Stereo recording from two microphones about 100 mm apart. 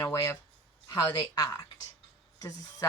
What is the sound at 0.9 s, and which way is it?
Speech, 40° left (ahead or behind).